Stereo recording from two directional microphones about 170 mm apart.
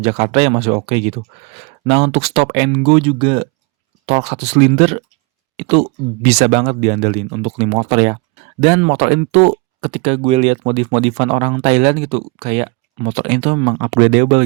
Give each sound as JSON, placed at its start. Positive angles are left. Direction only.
{"t": 0.0, "sound": "speech", "side_deg": -40}